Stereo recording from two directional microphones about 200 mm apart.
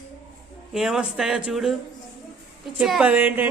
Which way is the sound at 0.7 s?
5° right (ahead or behind).